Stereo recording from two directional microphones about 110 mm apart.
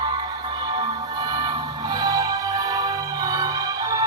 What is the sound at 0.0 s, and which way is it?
Music, 40° right (ahead or behind).